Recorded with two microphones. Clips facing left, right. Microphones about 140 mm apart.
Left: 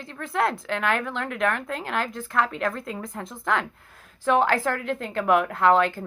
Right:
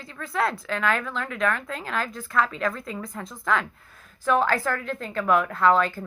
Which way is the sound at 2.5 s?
70° left (ahead or behind).